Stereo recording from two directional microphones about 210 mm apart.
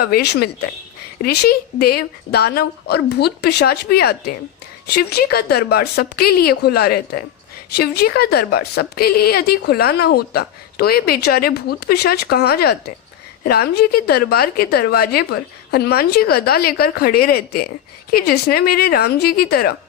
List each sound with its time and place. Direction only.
0.0 s a woman's voice: 50° left (ahead or behind)